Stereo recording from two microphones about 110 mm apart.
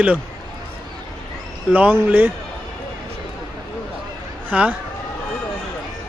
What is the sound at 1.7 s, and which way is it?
Speech, 15° right (ahead or behind).